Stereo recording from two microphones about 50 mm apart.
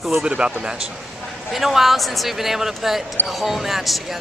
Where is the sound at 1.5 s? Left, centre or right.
Centre.